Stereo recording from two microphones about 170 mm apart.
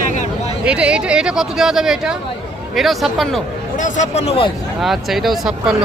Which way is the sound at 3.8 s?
45° left (ahead or behind).